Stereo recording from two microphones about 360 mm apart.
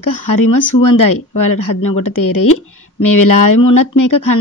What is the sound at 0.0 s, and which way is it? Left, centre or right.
Speech, left.